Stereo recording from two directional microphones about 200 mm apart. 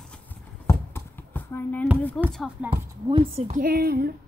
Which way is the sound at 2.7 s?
25° right (ahead or behind).